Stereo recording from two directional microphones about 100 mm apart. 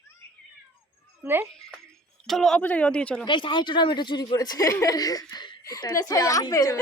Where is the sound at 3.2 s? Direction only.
55° left (ahead or behind); by 6.8 s 35° left (ahead or behind).